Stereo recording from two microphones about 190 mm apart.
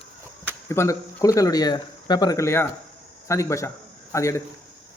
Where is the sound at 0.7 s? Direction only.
15° left (ahead or behind).